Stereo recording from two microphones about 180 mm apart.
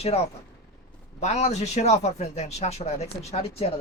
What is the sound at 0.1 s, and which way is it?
Speech, 35° left (ahead or behind).